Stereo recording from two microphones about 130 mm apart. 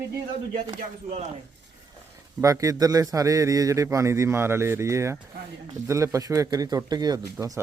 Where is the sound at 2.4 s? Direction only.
25° right (ahead or behind).